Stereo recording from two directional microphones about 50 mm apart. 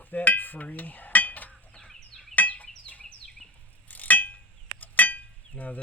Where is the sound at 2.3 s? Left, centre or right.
Left.